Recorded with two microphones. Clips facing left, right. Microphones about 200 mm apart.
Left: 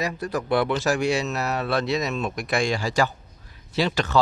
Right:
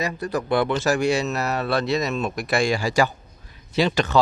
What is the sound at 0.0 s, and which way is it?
Speech, centre (ahead or behind).